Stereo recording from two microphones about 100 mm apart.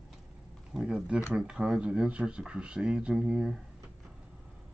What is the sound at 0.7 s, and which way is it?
Speech, 5° right (ahead or behind).